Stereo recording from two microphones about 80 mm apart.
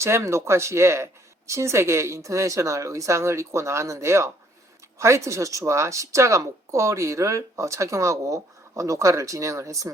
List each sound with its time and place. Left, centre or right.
0.0 s speech: right